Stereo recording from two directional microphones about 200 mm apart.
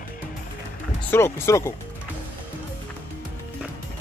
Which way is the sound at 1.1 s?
10° left (ahead or behind).